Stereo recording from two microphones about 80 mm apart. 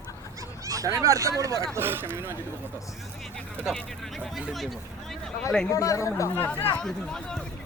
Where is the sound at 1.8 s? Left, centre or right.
Right.